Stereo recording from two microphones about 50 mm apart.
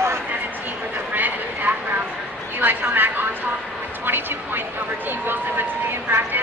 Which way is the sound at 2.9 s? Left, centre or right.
Right.